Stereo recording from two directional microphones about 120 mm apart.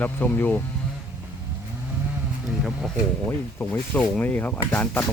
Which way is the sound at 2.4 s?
5° right (ahead or behind).